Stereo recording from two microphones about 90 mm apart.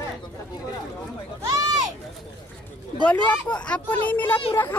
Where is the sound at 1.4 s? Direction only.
45° right (ahead or behind).